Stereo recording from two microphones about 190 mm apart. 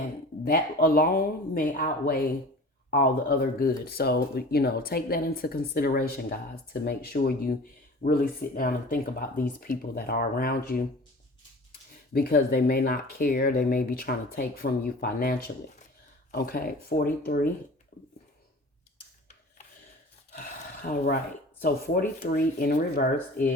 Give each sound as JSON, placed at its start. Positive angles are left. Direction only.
{"t": 0.4, "sound": "speech", "side_deg": 50}
{"t": 12.1, "sound": "speech", "side_deg": 50}
{"t": 20.3, "sound": "a sound", "side_deg": 45}
{"t": 21.6, "sound": "speech", "side_deg": 50}